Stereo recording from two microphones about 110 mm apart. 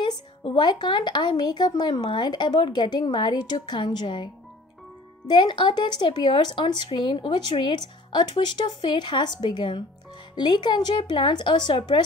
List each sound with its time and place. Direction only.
0.0 s a woman's voice: 45° left (ahead or behind)
5.3 s a woman's voice: 45° left (ahead or behind)